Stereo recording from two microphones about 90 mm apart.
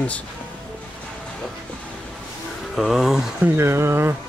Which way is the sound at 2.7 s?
Centre (ahead or behind).